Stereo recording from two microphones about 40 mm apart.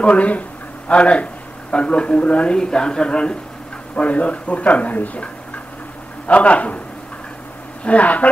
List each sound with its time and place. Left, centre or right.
0.0 s speech: left
4.0 s speech: left
7.8 s speech: left